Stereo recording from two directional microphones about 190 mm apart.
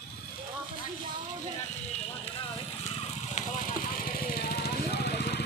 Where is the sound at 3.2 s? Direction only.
40° left (ahead or behind).